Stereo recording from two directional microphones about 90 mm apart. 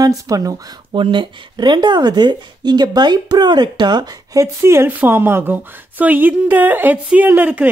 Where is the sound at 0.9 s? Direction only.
65° right (ahead or behind).